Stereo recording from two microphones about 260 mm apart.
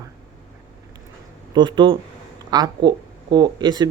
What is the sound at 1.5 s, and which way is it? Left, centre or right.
Speech, centre.